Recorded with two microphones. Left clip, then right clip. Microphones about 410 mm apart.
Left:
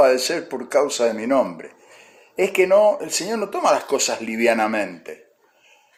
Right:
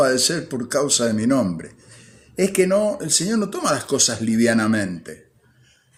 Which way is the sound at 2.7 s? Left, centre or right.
Right.